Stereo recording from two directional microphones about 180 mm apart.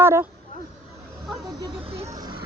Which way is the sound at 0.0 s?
15° right (ahead or behind).